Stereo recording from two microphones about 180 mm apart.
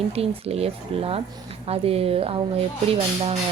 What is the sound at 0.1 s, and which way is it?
A woman's voice, 35° right (ahead or behind).